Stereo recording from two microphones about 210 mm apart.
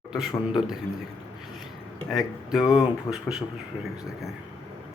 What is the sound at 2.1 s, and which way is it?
Speech, centre (ahead or behind).